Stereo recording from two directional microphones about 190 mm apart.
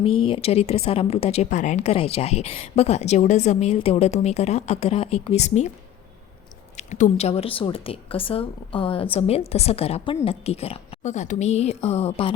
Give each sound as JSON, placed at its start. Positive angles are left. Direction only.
{"t": 0.0, "sound": "a woman's voice", "side_deg": 30}
{"t": 6.7, "sound": "a woman's voice", "side_deg": 40}